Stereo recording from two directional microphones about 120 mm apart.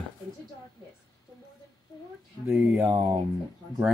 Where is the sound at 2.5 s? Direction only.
15° right (ahead or behind).